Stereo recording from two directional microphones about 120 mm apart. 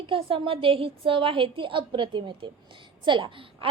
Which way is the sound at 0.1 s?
50° right (ahead or behind).